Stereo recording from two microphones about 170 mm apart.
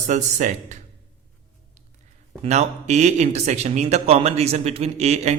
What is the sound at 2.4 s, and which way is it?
Speech, 40° right (ahead or behind).